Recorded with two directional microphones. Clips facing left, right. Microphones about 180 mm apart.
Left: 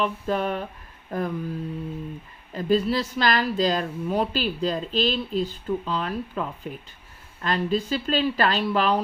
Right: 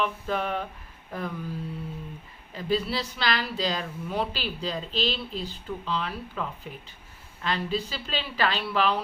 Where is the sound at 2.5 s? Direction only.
45° left (ahead or behind).